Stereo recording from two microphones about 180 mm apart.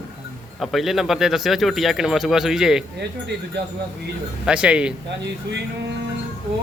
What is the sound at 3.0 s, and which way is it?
Speech, 70° right (ahead or behind).